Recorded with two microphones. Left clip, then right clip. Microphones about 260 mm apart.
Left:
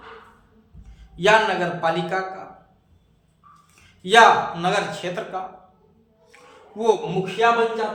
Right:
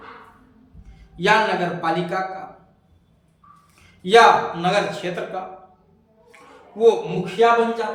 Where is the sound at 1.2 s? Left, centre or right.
Centre.